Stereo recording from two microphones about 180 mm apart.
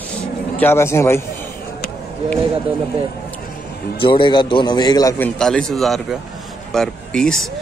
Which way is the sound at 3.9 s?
30° left (ahead or behind).